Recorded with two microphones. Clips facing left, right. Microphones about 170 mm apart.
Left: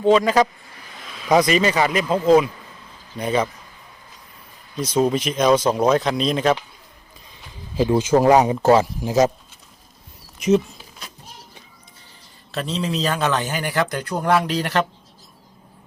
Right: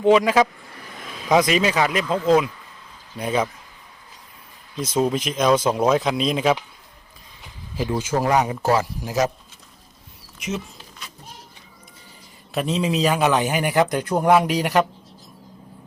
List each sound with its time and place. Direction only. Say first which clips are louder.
0.0 s speech: even; 10° right (ahead or behind)
4.8 s speech: left 2 dB; centre (ahead or behind)
7.8 s speech: left 6 dB; 25° left (ahead or behind)
10.5 s speech: left 13 dB; 35° left (ahead or behind)
12.5 s speech: right 3 dB; 15° right (ahead or behind)